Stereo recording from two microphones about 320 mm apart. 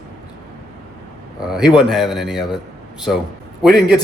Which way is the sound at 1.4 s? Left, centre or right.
Centre.